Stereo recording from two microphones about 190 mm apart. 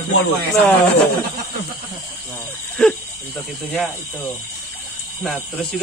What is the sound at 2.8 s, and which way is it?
Speech, 5° left (ahead or behind).